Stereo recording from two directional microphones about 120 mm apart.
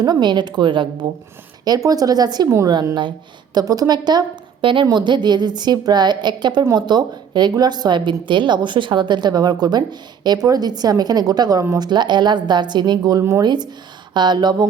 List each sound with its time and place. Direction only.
0.0 s speech: 35° right (ahead or behind)
1.6 s speech: 30° right (ahead or behind)